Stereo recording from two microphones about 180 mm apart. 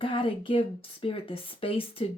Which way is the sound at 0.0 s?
30° left (ahead or behind).